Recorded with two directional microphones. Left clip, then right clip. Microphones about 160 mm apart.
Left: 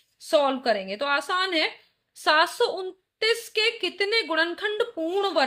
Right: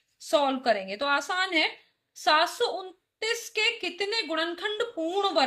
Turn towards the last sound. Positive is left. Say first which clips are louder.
# left 1 dB
turn(degrees=40)  # may be behind; listen again after turning